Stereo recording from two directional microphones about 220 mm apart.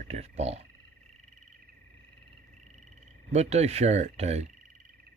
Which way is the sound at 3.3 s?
30° right (ahead or behind).